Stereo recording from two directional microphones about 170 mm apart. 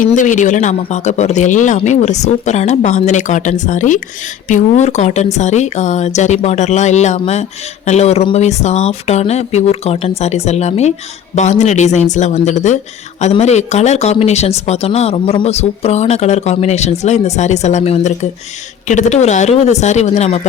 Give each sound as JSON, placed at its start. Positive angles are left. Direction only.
{"t": 0.0, "sound": "speech", "side_deg": 50}